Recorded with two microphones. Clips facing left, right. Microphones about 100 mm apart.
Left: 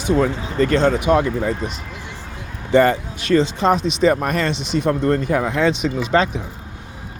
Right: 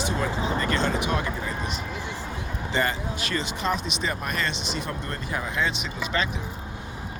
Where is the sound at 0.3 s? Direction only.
25° right (ahead or behind).